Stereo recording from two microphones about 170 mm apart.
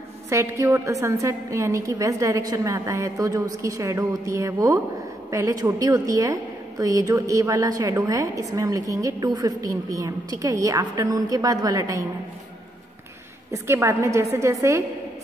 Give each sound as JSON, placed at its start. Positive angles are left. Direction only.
{"t": 0.3, "sound": "a woman's voice", "side_deg": -15}
{"t": 13.5, "sound": "a woman's voice", "side_deg": -15}